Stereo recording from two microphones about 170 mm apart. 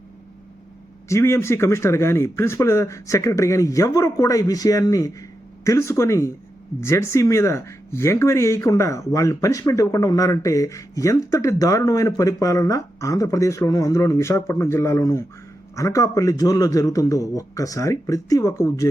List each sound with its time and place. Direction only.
1.0 s a man's voice: 15° left (ahead or behind)